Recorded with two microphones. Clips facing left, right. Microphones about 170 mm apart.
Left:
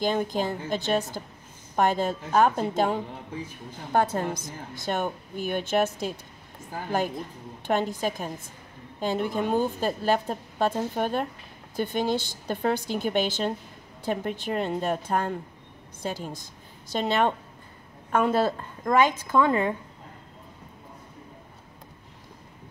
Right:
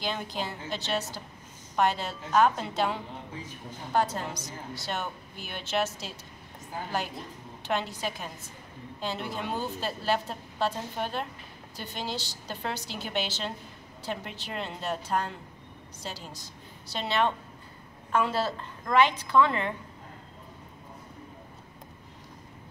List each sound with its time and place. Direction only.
0.0 s speech: 45° left (ahead or behind)
7.6 s speech: 50° left (ahead or behind)